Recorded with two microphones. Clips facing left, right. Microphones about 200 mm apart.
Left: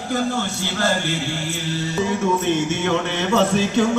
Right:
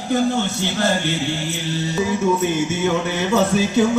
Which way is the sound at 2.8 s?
5° right (ahead or behind).